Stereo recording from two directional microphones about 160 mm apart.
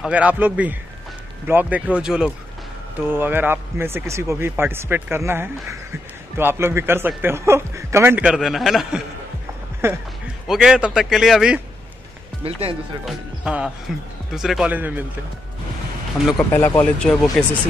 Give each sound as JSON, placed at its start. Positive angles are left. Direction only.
{"t": 0.0, "sound": "speech", "side_deg": -10}
{"t": 9.8, "sound": "a sound", "side_deg": -15}
{"t": 10.5, "sound": "speech", "side_deg": -5}
{"t": 12.4, "sound": "speech", "side_deg": -35}
{"t": 13.0, "sound": "speech", "side_deg": -5}
{"t": 16.5, "sound": "speech", "side_deg": 15}